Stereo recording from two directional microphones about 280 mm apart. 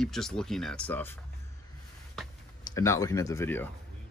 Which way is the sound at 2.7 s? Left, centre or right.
Centre.